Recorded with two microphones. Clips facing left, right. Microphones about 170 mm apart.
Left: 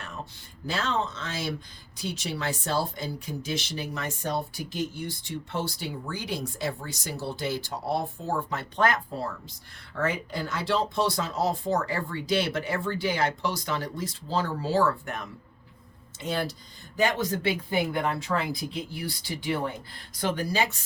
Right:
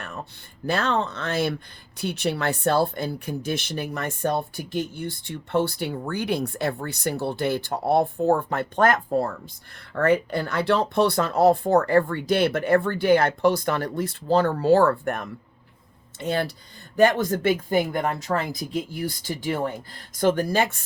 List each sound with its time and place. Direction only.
0.7 s speech: 60° right (ahead or behind)